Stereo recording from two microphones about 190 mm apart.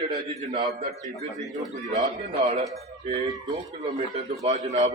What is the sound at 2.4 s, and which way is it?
Speech, 35° right (ahead or behind).